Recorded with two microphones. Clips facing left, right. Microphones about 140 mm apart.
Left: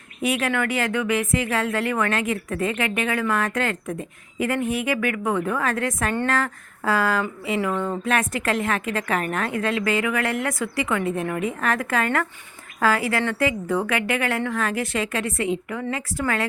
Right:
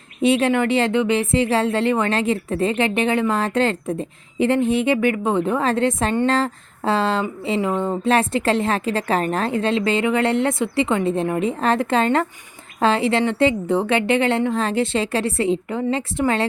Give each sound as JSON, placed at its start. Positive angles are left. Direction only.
{"t": 0.2, "sound": "speech", "side_deg": -25}